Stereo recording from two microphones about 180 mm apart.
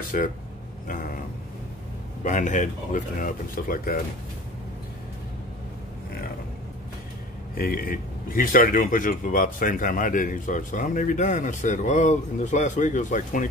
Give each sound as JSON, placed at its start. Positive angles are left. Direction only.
{"t": 0.1, "sound": "speech", "side_deg": 50}
{"t": 2.2, "sound": "speech", "side_deg": 45}
{"t": 7.5, "sound": "speech", "side_deg": 55}